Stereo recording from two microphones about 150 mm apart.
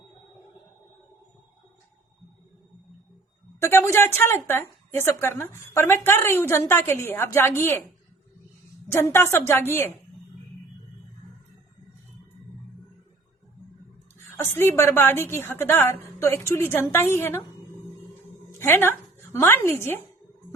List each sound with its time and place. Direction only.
3.6 s a woman's voice: 20° left (ahead or behind)
8.9 s a woman's voice: 15° left (ahead or behind)
14.3 s a woman's voice: 15° left (ahead or behind)
18.6 s speech: 15° left (ahead or behind)